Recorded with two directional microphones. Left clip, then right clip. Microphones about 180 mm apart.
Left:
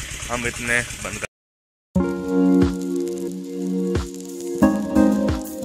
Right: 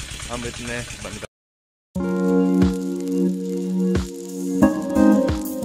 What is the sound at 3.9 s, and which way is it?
Music, centre (ahead or behind).